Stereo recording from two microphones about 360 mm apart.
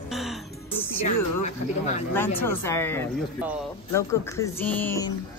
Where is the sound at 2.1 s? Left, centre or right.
Centre.